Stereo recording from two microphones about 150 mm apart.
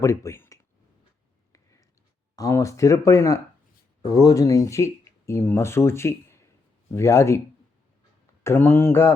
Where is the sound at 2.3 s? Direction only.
20° left (ahead or behind).